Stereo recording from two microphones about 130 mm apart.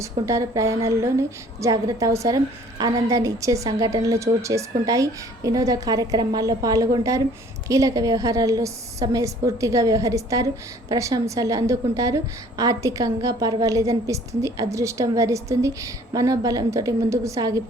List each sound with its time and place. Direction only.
0.0 s a woman's voice: 25° right (ahead or behind)